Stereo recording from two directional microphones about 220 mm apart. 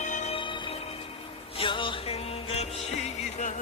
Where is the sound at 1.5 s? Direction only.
20° left (ahead or behind).